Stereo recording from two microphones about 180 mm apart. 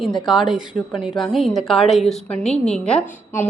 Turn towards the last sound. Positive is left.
turn(degrees=5)  # may be behind; listen again after turning